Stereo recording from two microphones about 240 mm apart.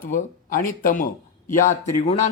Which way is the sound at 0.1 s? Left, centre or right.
Left.